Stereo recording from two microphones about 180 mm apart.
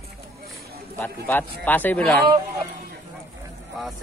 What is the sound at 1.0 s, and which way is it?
Speech, 10° left (ahead or behind).